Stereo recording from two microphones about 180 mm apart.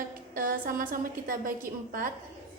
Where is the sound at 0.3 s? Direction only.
50° right (ahead or behind).